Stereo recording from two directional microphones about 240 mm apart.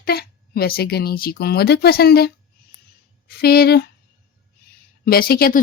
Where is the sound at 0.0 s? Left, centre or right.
Left.